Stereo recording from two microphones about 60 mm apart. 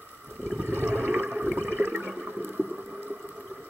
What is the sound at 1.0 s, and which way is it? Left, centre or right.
Toilet flush, centre.